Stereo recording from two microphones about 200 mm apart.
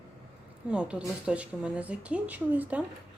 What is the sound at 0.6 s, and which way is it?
A woman's voice, 5° right (ahead or behind).